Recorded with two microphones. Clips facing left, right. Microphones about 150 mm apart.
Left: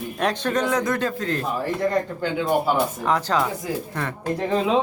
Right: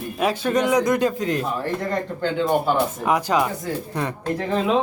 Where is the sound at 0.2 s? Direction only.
5° right (ahead or behind).